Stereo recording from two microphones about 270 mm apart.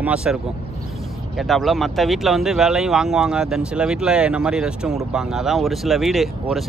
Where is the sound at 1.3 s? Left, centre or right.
Centre.